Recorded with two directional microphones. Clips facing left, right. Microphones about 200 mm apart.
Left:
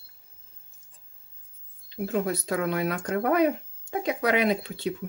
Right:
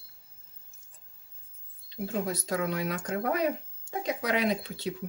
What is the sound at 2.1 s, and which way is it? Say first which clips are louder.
Speech: left 4 dB; 60° left (ahead or behind).